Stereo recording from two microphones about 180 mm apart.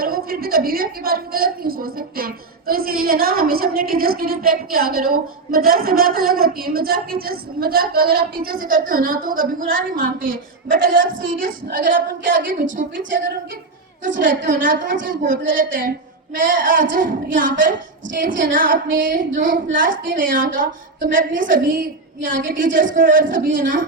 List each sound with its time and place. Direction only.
0.0 s a woman's voice: 55° right (ahead or behind)